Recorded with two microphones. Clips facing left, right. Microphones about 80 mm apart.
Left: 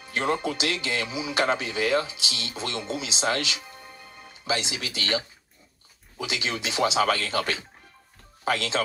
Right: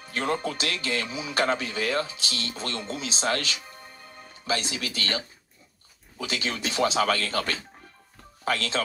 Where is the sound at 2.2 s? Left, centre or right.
Right.